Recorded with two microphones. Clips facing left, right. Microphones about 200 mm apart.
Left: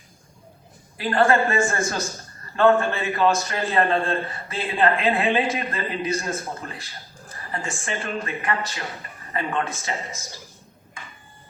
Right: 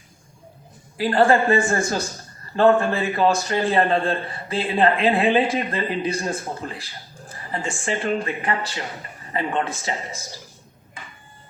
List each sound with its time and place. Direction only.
0.9 s a man's voice: 30° right (ahead or behind)